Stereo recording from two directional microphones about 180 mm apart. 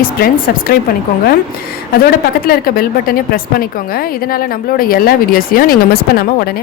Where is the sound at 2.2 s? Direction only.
55° left (ahead or behind).